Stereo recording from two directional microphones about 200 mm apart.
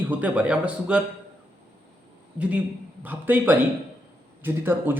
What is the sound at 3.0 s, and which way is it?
A man's voice, 10° right (ahead or behind).